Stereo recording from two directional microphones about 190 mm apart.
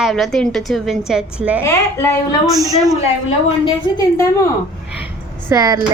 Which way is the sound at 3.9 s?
15° left (ahead or behind).